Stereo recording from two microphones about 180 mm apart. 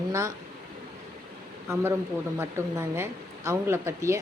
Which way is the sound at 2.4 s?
15° right (ahead or behind).